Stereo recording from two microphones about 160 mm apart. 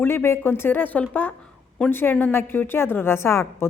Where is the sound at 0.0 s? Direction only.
15° left (ahead or behind).